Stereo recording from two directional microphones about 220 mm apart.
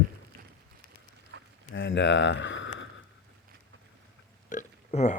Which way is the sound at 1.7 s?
60° left (ahead or behind).